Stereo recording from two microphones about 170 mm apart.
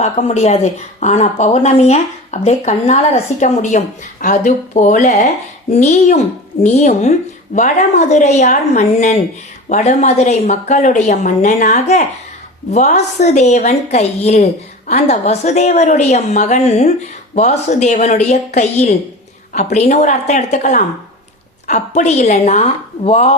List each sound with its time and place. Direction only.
0.0 s a woman's voice: 40° left (ahead or behind)